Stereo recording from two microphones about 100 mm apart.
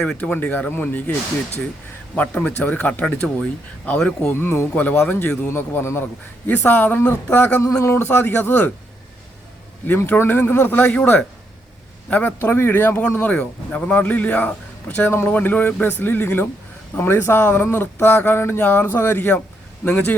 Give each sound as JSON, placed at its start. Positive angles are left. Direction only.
{"t": 0.2, "sound": "speech", "side_deg": 15}
{"t": 2.1, "sound": "speech", "side_deg": 15}
{"t": 9.8, "sound": "speech", "side_deg": 20}